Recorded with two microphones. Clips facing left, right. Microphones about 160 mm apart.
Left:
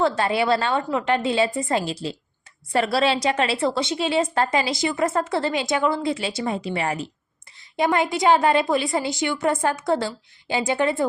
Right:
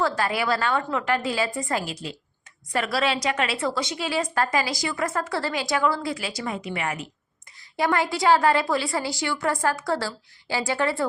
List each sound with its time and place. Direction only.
0.2 s a woman's voice: 25° left (ahead or behind)
7.8 s a woman's voice: 20° left (ahead or behind)